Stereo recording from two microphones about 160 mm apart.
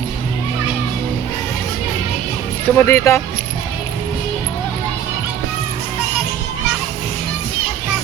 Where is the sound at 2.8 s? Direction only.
15° left (ahead or behind).